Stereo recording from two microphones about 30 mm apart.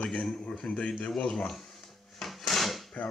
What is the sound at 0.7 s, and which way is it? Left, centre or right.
Speech, left.